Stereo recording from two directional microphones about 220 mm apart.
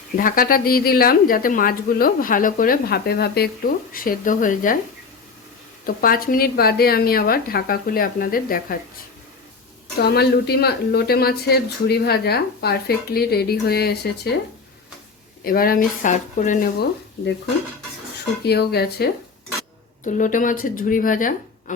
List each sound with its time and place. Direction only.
0.2 s a woman's voice: 40° left (ahead or behind)
5.8 s a woman's voice: 40° left (ahead or behind)
10.0 s speech: 45° left (ahead or behind)
15.4 s a woman's voice: 40° left (ahead or behind)
18.4 s speech: 45° left (ahead or behind)
20.1 s a woman's voice: 35° left (ahead or behind)